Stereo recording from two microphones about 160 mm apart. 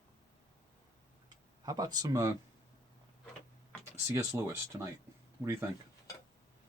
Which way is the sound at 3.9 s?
15° right (ahead or behind).